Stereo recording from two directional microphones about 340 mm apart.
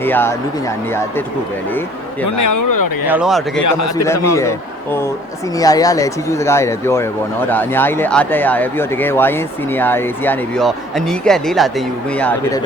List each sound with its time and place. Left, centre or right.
0.0 s speech: centre
2.2 s speech: left
3.1 s speech: centre
3.6 s a man's voice: left
4.4 s speech: centre